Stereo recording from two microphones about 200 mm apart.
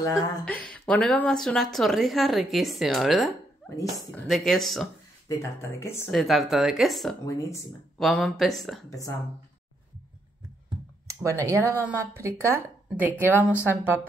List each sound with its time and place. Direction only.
0.0 s speech: 15° left (ahead or behind)
0.7 s a woman's voice: 5° left (ahead or behind)
5.3 s speech: 15° left (ahead or behind)
6.0 s a woman's voice: centre (ahead or behind)
7.2 s speech: 15° left (ahead or behind)
8.0 s a woman's voice: centre (ahead or behind)
11.1 s speech: 15° right (ahead or behind)